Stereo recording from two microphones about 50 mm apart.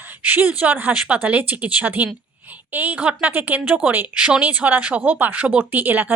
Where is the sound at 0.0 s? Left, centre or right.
Right.